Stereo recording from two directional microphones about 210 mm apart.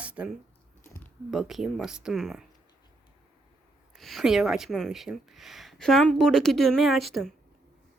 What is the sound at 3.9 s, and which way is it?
Speech, centre (ahead or behind).